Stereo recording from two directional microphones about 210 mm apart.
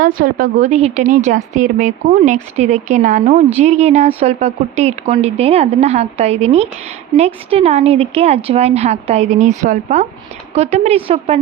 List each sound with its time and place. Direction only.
0.0 s a woman's voice: 40° right (ahead or behind)